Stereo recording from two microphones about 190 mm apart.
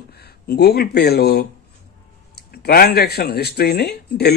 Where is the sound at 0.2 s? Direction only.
55° left (ahead or behind).